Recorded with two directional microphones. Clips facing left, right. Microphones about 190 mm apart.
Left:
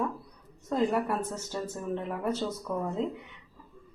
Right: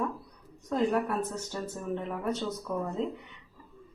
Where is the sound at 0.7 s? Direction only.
5° left (ahead or behind).